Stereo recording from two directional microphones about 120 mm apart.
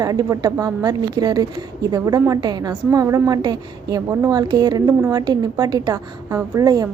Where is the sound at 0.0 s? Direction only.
30° right (ahead or behind).